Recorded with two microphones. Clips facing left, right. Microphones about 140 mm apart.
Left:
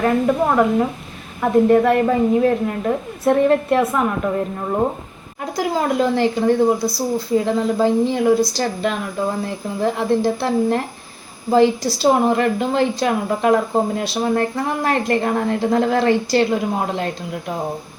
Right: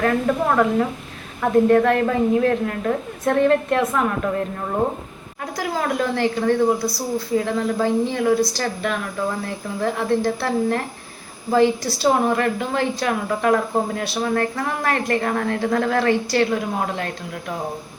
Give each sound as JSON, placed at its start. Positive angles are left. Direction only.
{"t": 0.0, "sound": "a woman's voice", "side_deg": 10}
{"t": 5.5, "sound": "a woman's voice", "side_deg": 20}